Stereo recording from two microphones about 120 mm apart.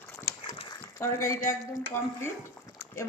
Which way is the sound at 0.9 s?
25° left (ahead or behind).